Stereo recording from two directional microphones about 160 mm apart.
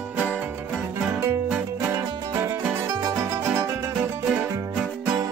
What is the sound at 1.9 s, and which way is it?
Music, 20° right (ahead or behind).